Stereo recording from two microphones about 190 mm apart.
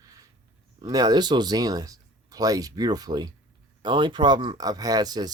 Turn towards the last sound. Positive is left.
turn(degrees=-20)  # may be behind; listen again after turning